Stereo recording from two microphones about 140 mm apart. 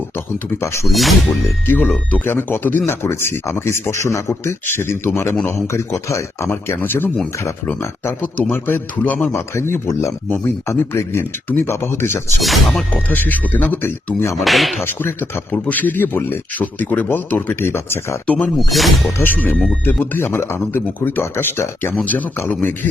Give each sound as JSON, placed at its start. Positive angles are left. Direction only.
{"t": 0.6, "sound": "a man's voice", "side_deg": 20}
{"t": 0.9, "sound": "speech", "side_deg": 0}
{"t": 1.3, "sound": "a man's voice", "side_deg": 15}
{"t": 12.4, "sound": "speech", "side_deg": 0}
{"t": 12.9, "sound": "speech", "side_deg": 15}
{"t": 14.4, "sound": "speech", "side_deg": 0}
{"t": 14.8, "sound": "speech", "side_deg": 15}
{"t": 19.2, "sound": "speech", "side_deg": 15}